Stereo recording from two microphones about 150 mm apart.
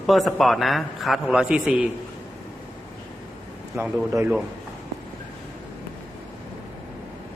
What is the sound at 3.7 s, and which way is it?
Speech, 20° right (ahead or behind).